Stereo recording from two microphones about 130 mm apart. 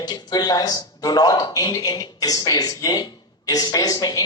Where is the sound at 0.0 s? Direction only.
30° left (ahead or behind).